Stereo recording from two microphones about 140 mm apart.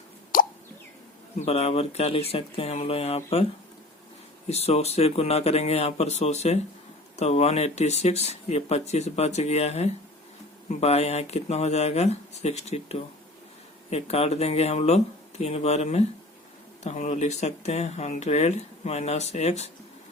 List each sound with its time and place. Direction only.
0.3 s plop: 80° left
1.4 s speech: 50° left (ahead or behind)
4.4 s speech: 50° left (ahead or behind)